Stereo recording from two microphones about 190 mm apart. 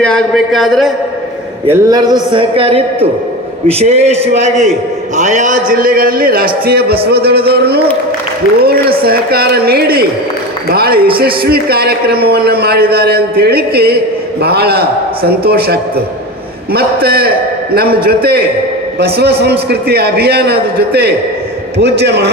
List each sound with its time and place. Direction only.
0.0 s speech: 5° left (ahead or behind)
1.7 s a man's voice: 20° right (ahead or behind); by 22.3 s 60° right (ahead or behind)